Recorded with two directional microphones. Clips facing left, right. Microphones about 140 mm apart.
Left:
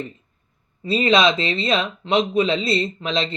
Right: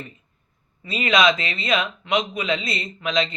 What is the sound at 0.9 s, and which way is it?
Speech, 30° left (ahead or behind).